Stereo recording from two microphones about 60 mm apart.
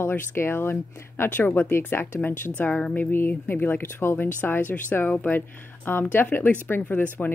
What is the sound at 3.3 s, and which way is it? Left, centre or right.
Speech, left.